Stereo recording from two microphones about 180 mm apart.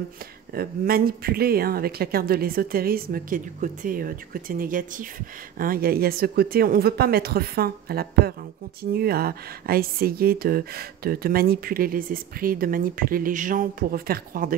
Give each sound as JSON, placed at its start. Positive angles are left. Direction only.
{"t": 0.6, "sound": "speech", "side_deg": -55}